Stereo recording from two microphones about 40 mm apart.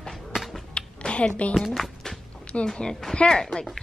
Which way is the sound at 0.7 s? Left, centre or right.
Left.